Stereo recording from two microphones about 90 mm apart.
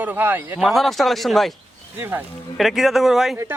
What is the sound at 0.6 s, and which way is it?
Speech, centre (ahead or behind).